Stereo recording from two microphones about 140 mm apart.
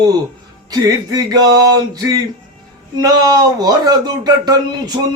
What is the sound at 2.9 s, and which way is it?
Speech, 30° right (ahead or behind).